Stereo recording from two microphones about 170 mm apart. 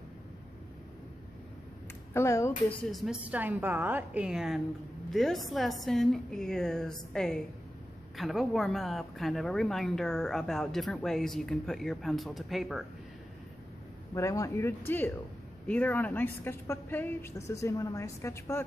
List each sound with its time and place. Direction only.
2.1 s a woman's voice: 15° left (ahead or behind)
2.9 s a woman's voice: centre (ahead or behind)
14.1 s a woman's voice: 20° left (ahead or behind)